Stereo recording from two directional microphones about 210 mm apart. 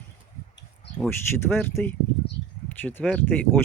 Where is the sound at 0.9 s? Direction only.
5° left (ahead or behind).